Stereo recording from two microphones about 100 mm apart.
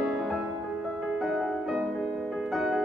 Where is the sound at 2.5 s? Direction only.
5° right (ahead or behind).